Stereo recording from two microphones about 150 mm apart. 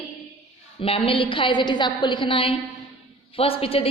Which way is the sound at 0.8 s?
40° left (ahead or behind).